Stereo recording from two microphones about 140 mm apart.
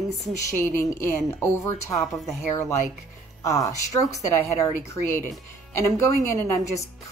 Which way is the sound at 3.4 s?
25° left (ahead or behind).